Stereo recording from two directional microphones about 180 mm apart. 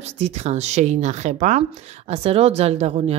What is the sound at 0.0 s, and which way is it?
Speech, 40° right (ahead or behind).